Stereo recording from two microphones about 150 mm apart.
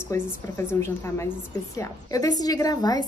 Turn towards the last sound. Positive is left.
turn(degrees=25)  # may be behind; listen again after turning